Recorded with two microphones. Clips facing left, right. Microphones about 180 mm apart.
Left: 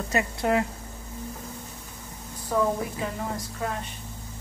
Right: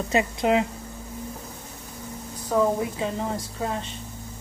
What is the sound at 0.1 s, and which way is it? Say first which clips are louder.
Speech: right 3 dB; 20° right (ahead or behind).